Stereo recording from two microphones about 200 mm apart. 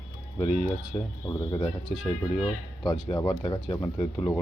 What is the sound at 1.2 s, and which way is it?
Speech, 25° left (ahead or behind).